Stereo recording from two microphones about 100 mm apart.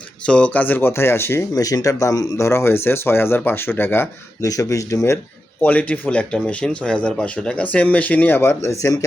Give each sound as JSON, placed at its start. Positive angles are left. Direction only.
{"t": 0.3, "sound": "speech", "side_deg": 10}
{"t": 1.5, "sound": "speech", "side_deg": 35}
{"t": 4.4, "sound": "speech", "side_deg": 35}
{"t": 5.6, "sound": "speech", "side_deg": 15}